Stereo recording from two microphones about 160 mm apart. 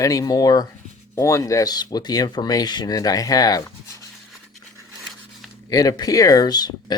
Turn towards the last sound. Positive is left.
turn(degrees=25)  # may be behind; listen again after turning